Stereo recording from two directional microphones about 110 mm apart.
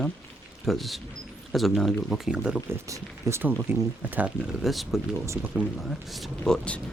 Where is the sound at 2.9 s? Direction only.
25° right (ahead or behind).